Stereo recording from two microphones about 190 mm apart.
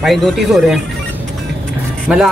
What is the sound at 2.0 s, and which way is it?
Speech, 5° right (ahead or behind).